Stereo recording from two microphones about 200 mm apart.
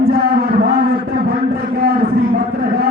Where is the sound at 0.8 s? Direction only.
50° right (ahead or behind).